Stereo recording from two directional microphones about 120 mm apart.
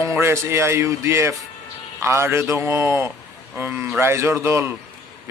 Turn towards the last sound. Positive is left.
turn(degrees=-20)  # may be behind; listen again after turning